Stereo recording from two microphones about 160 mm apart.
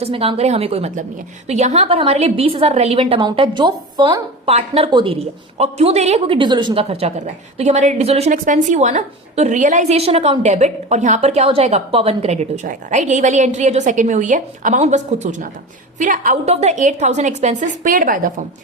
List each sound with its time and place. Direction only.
0.0 s a woman's voice: 35° right (ahead or behind)
4.4 s a woman's voice: 40° right (ahead or behind)
8.3 s a woman's voice: 50° right (ahead or behind)